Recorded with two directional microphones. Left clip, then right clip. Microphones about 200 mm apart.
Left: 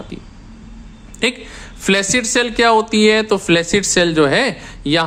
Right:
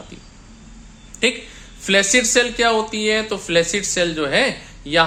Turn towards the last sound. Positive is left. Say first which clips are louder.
# left 1 dB
turn(degrees=35)  # may be behind; listen again after turning